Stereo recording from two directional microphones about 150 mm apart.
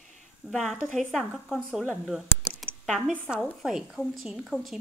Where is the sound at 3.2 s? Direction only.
5° right (ahead or behind).